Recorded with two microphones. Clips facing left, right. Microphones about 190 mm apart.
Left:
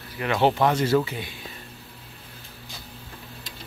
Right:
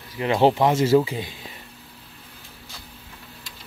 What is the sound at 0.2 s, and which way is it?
Speech, 25° right (ahead or behind).